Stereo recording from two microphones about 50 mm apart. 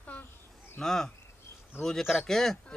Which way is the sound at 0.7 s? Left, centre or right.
Centre.